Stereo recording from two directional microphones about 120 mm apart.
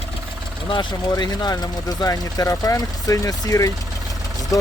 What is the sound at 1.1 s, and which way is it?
Speech, 35° left (ahead or behind).